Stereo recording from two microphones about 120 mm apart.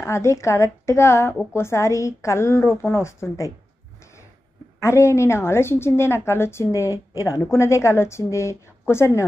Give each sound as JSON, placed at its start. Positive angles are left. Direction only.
{"t": 0.0, "sound": "a woman's voice", "side_deg": 25}
{"t": 4.7, "sound": "a woman's voice", "side_deg": 25}